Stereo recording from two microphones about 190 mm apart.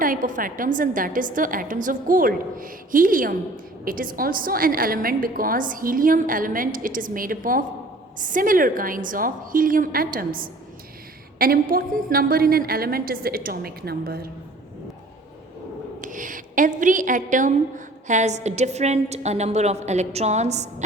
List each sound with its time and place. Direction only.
0.0 s a woman's voice: 45° right (ahead or behind)
16.0 s a woman's voice: 45° right (ahead or behind)